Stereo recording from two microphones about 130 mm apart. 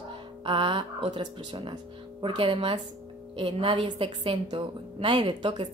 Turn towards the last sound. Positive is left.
turn(degrees=-35)  # may be behind; listen again after turning